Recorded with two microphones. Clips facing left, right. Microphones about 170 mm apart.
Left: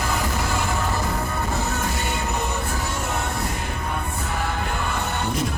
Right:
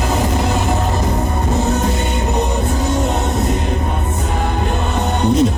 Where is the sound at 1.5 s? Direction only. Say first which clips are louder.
Right 12 dB; 20° right (ahead or behind).